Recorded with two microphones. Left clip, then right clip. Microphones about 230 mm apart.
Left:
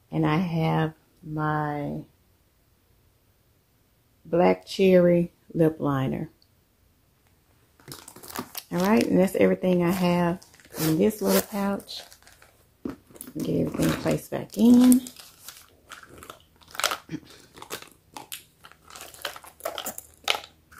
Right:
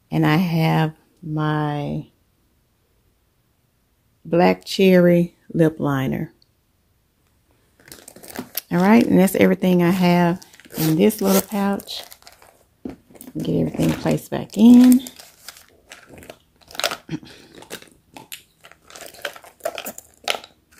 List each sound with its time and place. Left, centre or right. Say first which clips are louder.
0.1 s speech: right 6 dB; right
4.3 s speech: right 4 dB; right
8.2 s crumpling: right 3 dB; centre
8.6 s speech: right 7 dB; right
10.4 s squish: right 5 dB; right
11.0 s speech: right 5 dB; right
12.3 s a sound: right 7 dB; right
12.8 s biting: right 1 dB; centre
13.5 s speech: right 4 dB; right
14.7 s speech: right 6 dB; centre
16.3 s biting: right 4 dB; centre
17.6 s dog: right 1 dB; centre
18.6 s biting: right 4 dB; centre